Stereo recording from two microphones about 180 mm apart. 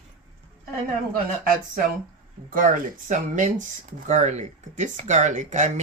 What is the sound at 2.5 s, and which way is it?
Speech, 45° right (ahead or behind).